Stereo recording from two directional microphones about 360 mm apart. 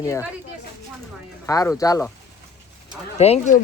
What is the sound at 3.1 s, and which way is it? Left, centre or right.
Speech, centre.